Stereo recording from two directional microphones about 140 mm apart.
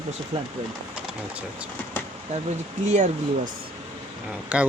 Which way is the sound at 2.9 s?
55° right (ahead or behind).